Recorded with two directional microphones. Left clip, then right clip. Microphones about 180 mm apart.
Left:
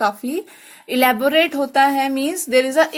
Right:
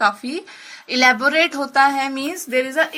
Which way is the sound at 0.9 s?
65° left (ahead or behind).